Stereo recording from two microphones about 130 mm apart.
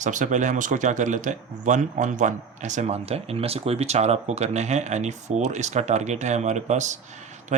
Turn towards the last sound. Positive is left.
turn(degrees=-65)  # may be behind; listen again after turning